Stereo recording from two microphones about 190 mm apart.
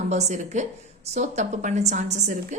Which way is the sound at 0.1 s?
35° right (ahead or behind).